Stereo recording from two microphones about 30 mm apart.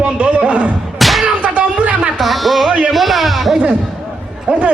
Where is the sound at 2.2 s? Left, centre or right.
Centre.